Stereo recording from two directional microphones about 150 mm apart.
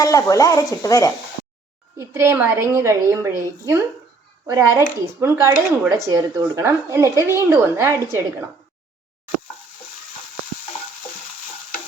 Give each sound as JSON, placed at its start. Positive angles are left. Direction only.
{"t": 0.0, "sound": "speech", "side_deg": 25}
{"t": 2.0, "sound": "a woman's voice", "side_deg": -20}